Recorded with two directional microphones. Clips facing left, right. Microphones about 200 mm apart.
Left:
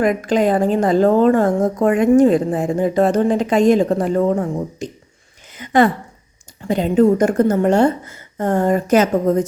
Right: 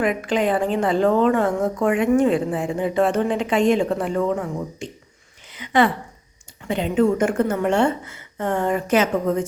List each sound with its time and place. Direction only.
0.0 s a woman's voice: 40° left (ahead or behind)
5.5 s a sound: 45° left (ahead or behind)
6.7 s a woman's voice: 40° left (ahead or behind)